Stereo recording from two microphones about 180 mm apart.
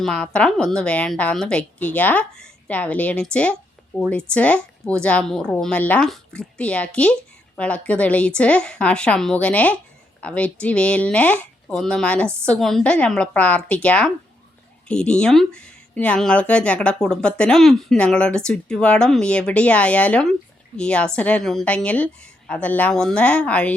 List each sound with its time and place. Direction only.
0.0 s a woman's voice: 5° left (ahead or behind)